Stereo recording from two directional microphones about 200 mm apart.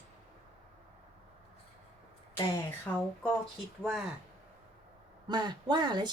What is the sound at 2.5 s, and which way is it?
Speech, 10° left (ahead or behind).